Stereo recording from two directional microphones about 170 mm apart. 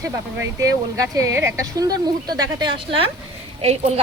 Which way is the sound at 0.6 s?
20° right (ahead or behind).